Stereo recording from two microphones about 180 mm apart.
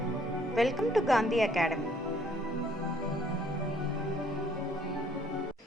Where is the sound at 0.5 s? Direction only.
Centre (ahead or behind).